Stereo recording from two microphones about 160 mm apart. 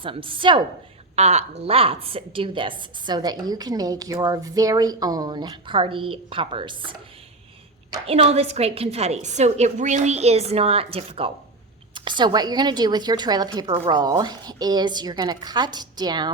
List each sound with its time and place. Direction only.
0.0 s a woman's voice: 35° right (ahead or behind)
1.1 s a woman's voice: 45° right (ahead or behind)
8.0 s a woman's voice: 40° right (ahead or behind)